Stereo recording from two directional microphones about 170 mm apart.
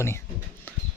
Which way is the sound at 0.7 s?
10° left (ahead or behind).